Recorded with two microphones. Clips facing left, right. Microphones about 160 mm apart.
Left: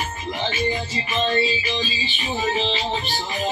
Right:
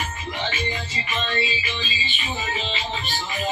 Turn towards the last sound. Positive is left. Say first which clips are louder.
# left 5 dB
turn(degrees=35)  # may be behind; listen again after turning